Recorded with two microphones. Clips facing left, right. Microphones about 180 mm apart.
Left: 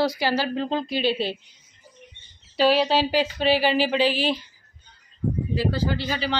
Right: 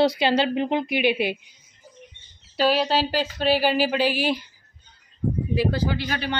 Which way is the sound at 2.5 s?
Centre (ahead or behind).